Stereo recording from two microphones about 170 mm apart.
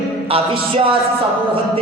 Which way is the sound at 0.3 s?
35° right (ahead or behind).